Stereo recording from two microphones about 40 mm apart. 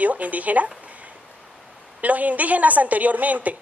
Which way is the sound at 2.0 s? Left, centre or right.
Right.